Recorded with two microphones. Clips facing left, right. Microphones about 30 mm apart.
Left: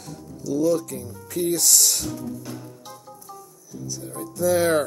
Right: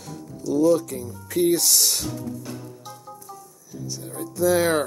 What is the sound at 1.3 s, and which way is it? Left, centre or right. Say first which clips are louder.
Speech: right 2 dB; right.